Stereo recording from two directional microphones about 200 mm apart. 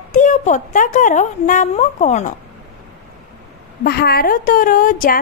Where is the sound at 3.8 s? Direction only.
50° left (ahead or behind).